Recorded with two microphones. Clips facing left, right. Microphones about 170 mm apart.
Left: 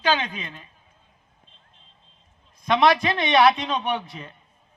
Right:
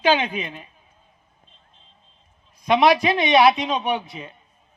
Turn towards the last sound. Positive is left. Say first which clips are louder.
# right 2 dB
turn(degrees=-5)  # may be behind; listen again after turning